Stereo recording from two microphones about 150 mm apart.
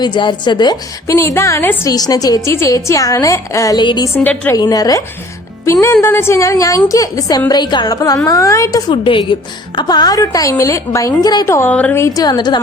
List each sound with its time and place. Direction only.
0.0 s a woman's voice: 30° left (ahead or behind)
4.1 s a woman's voice: 15° left (ahead or behind)
4.5 s a woman's voice: 25° left (ahead or behind)
8.9 s a woman's voice: 35° left (ahead or behind); by 12.0 s 10° left (ahead or behind)
12.0 s a woman's voice: 25° left (ahead or behind)